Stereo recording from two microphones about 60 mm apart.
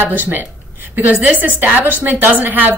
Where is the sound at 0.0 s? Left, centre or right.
Right.